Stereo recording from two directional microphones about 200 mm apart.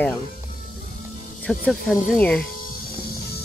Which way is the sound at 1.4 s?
5° left (ahead or behind).